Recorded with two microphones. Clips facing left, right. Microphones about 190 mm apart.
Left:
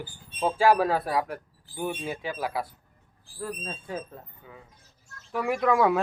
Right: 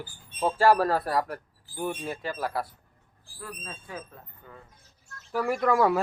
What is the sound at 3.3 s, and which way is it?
Speech, 30° left (ahead or behind).